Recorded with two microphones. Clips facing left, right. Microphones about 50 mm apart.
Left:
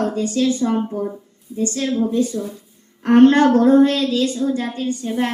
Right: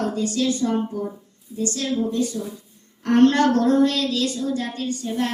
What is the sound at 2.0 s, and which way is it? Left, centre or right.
Speech, centre.